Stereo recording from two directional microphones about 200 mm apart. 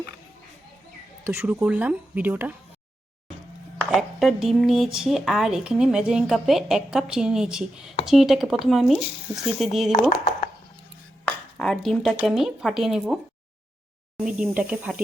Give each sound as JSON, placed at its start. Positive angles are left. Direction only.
{"t": 1.3, "sound": "speech", "side_deg": -10}
{"t": 3.9, "sound": "speech", "side_deg": 0}
{"t": 9.9, "sound": "speech", "side_deg": 35}
{"t": 11.3, "sound": "a sound", "side_deg": 5}
{"t": 12.1, "sound": "speech", "side_deg": 0}
{"t": 14.3, "sound": "speech", "side_deg": -5}